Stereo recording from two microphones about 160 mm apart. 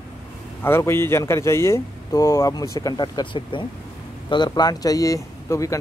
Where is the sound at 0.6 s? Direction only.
15° left (ahead or behind).